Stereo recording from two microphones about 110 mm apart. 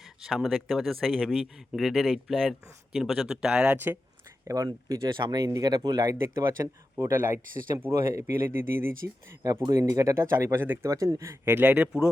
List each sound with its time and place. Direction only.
0.0 s speech: 5° right (ahead or behind)
4.4 s speech: 35° right (ahead or behind)
6.1 s speech: 25° right (ahead or behind)